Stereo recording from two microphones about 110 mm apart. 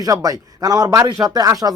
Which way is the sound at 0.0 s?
35° right (ahead or behind).